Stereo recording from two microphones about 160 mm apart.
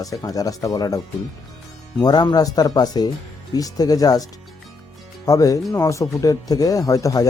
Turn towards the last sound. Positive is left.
turn(degrees=20)  # may be behind; listen again after turning